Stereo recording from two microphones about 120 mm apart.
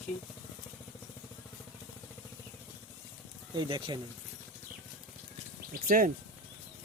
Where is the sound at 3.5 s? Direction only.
40° right (ahead or behind).